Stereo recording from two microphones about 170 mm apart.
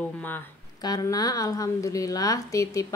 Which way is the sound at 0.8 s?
20° left (ahead or behind).